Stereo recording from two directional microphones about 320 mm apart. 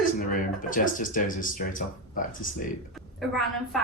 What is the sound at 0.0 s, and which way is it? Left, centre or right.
Speech, left.